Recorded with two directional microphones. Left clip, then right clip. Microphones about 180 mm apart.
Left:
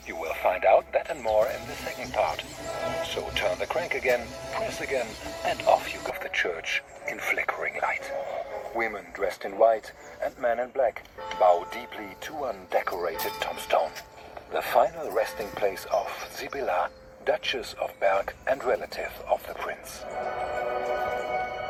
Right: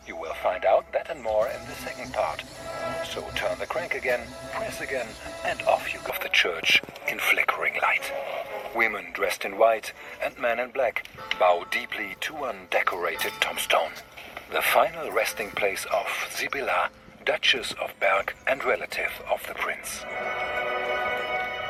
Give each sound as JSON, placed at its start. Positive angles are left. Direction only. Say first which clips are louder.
{"t": 0.1, "sound": "speech", "louder": "left 1 dB", "side_deg": -5}
{"t": 7.2, "sound": "speech", "louder": "right 5 dB", "side_deg": -20}